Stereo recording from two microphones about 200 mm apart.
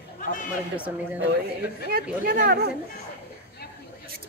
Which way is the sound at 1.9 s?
45° right (ahead or behind).